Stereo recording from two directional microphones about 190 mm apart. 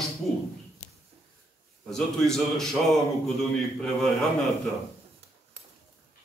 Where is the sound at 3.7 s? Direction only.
5° left (ahead or behind).